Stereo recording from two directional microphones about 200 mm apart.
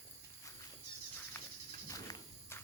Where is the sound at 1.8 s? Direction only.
15° left (ahead or behind).